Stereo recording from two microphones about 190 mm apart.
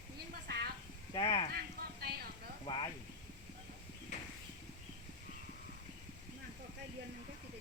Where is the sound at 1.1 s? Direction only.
15° left (ahead or behind).